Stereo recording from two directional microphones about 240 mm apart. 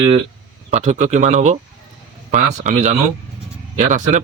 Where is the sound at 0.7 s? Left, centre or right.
Right.